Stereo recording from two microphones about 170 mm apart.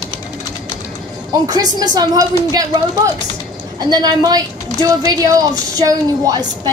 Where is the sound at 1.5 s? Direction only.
25° right (ahead or behind).